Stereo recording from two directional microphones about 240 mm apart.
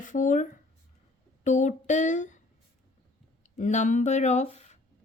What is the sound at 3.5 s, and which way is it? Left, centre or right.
A woman's voice, left.